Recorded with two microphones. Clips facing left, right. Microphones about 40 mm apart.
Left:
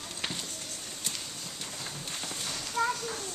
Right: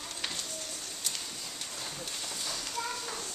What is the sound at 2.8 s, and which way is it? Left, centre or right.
Children playing, left.